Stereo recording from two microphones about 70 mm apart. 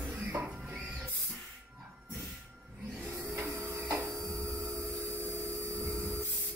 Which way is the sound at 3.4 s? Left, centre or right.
Right.